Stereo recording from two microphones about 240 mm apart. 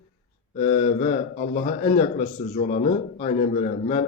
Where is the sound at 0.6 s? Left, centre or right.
Left.